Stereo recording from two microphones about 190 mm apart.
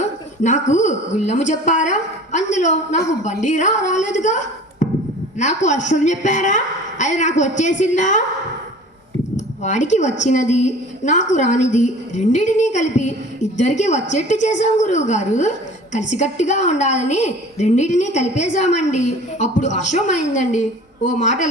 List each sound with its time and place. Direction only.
0.0 s a woman's voice: 40° left (ahead or behind)
9.6 s a woman's voice: 40° left (ahead or behind)